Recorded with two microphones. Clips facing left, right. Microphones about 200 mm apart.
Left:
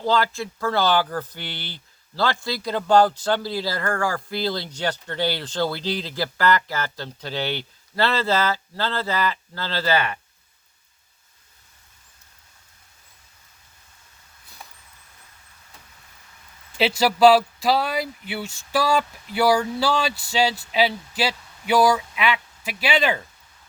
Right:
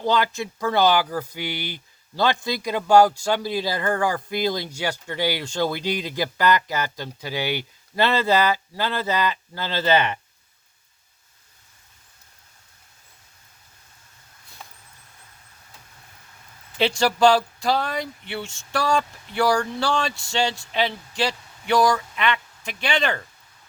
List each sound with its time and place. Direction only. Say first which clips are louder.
0.0 s speech: even; 20° right (ahead or behind)
16.7 s speech: left 1 dB; 5° left (ahead or behind)